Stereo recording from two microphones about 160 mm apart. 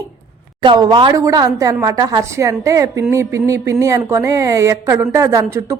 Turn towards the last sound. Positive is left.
turn(degrees=-20)  # may be behind; listen again after turning